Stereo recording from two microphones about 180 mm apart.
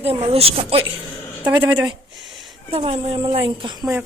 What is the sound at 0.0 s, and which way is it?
Speech, 35° right (ahead or behind).